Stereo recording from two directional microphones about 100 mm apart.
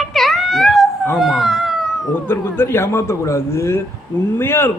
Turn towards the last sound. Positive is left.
turn(degrees=25)  # may be behind; listen again after turning